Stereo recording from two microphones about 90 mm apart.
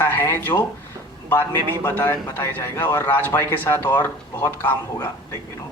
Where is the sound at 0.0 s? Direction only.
25° left (ahead or behind).